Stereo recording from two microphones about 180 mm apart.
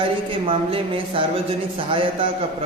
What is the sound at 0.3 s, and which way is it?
Speech, 30° right (ahead or behind).